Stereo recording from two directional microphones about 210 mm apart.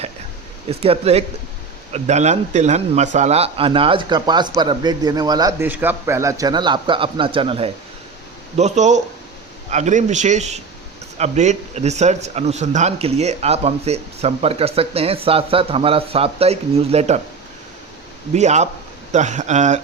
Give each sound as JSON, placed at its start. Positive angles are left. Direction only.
{"t": 0.7, "sound": "speech", "side_deg": -30}
{"t": 18.3, "sound": "speech", "side_deg": -35}